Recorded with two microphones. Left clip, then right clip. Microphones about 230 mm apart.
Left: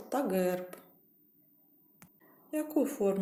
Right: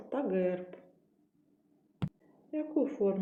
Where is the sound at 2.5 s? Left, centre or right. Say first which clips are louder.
Left 1 dB; left.